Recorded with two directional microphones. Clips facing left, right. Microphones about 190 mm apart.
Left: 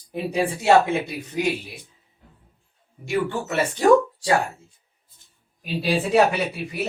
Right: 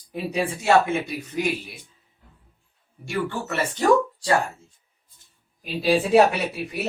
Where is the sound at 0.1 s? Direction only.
25° left (ahead or behind).